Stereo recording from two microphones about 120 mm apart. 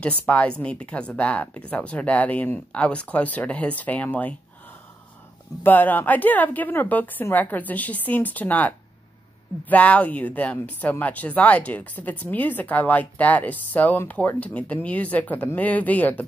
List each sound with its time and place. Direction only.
0.3 s speech: 10° left (ahead or behind)
5.6 s speech: 15° left (ahead or behind)